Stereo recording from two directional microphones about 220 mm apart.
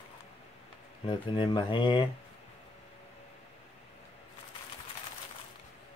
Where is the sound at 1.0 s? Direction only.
20° left (ahead or behind).